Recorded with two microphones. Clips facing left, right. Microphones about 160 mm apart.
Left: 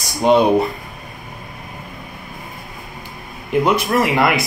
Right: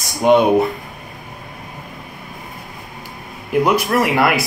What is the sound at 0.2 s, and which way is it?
Speech, 5° right (ahead or behind).